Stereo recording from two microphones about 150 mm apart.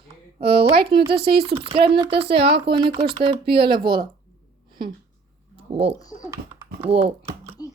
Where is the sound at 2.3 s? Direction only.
90° right.